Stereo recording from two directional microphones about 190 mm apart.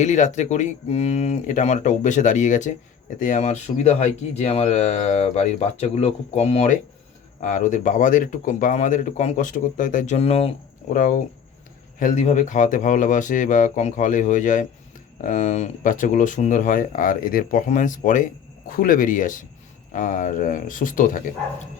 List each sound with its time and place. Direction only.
0.0 s speech: 40° left (ahead or behind)
10.9 s speech: 45° left (ahead or behind)